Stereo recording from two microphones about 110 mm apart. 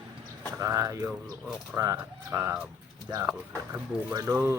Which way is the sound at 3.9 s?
5° right (ahead or behind).